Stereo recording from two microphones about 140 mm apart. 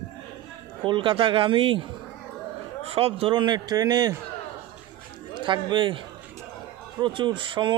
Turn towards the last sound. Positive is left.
turn(degrees=-35)  # may be behind; listen again after turning